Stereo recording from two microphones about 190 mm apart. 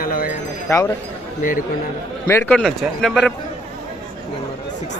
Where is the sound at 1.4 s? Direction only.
45° left (ahead or behind).